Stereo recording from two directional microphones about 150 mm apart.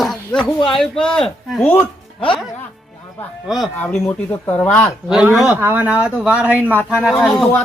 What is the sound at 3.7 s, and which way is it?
Speech, 15° left (ahead or behind).